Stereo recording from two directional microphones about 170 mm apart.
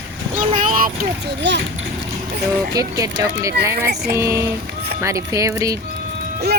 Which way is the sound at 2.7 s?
20° right (ahead or behind).